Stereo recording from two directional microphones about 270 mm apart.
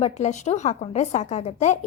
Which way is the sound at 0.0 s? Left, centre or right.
Left.